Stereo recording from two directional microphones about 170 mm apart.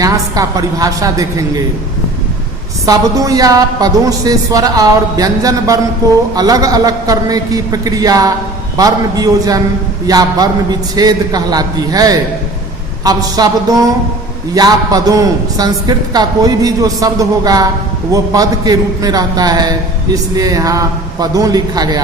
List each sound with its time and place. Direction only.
0.0 s a man's voice: 20° right (ahead or behind)
2.8 s a man's voice: 20° right (ahead or behind)